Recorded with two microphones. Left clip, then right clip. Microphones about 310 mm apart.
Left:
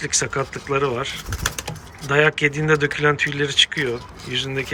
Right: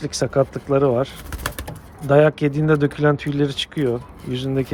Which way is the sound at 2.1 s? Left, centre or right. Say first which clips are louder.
Right 2 dB; centre.